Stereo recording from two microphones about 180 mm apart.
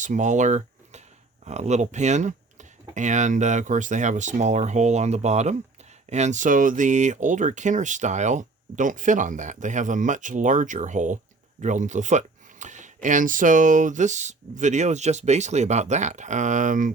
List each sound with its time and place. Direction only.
0.0 s speech: 45° right (ahead or behind)